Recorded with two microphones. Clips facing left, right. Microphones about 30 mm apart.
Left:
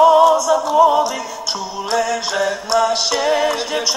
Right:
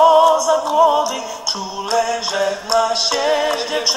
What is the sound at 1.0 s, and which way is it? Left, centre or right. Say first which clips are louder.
Music: left 1 dB; left.